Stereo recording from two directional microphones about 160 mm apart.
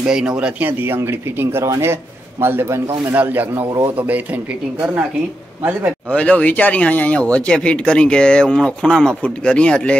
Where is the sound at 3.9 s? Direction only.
10° right (ahead or behind).